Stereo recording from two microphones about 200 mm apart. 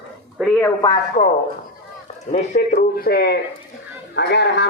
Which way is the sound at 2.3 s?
35° left (ahead or behind).